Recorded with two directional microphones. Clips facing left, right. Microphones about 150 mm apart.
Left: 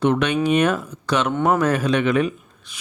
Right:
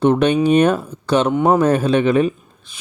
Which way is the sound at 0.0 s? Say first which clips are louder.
Right 5 dB; 30° right (ahead or behind).